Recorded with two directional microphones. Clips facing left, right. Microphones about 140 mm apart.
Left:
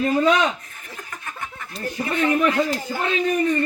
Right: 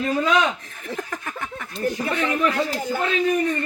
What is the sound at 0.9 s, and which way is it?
Snicker, 90° right.